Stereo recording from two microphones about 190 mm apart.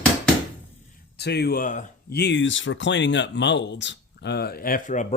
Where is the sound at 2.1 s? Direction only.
60° left (ahead or behind).